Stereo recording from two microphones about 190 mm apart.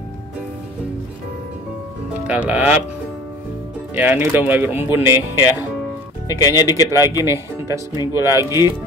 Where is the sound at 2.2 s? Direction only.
5° right (ahead or behind).